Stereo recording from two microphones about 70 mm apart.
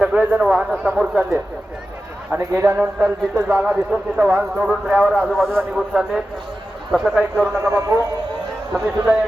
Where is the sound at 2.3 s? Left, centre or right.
Right.